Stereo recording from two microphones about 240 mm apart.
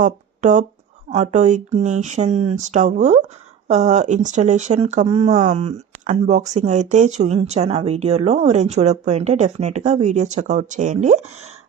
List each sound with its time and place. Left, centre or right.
0.0 s speech: right